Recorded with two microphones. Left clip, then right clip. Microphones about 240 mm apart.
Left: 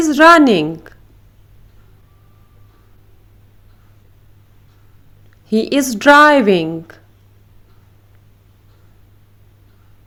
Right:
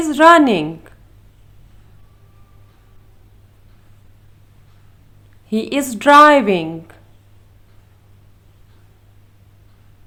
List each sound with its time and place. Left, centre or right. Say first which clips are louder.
0.0 s a woman's voice: left 1 dB; centre
5.5 s a woman's voice: left 4 dB; centre